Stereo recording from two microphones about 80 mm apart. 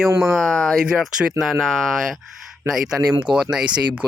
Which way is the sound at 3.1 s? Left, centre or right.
Right.